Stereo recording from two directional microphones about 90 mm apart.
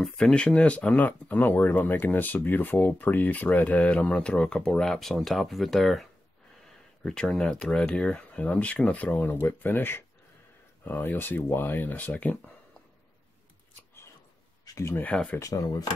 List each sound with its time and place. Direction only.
0.0 s speech: 10° left (ahead or behind)
14.6 s a sound: 40° left (ahead or behind)
15.0 s speech: 15° left (ahead or behind)
15.3 s speech: 40° left (ahead or behind)